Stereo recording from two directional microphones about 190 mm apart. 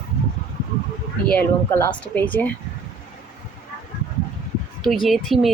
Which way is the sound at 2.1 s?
10° left (ahead or behind).